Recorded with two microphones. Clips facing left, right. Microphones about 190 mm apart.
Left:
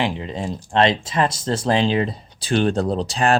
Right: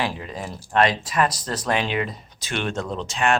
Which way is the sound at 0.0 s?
20° left (ahead or behind).